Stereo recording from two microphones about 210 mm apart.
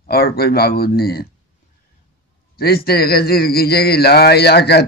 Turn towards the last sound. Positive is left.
turn(degrees=50)  # may be behind; listen again after turning